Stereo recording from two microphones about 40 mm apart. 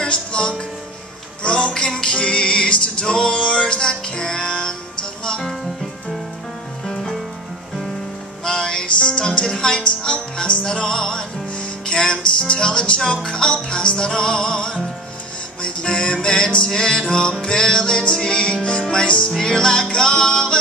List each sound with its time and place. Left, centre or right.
0.0 s music: left
8.5 s music: centre
8.8 s speech: left
10.6 s music: centre